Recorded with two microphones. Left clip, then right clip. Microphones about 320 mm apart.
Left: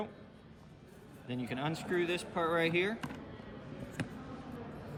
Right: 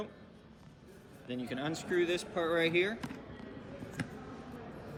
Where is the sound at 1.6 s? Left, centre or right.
Left.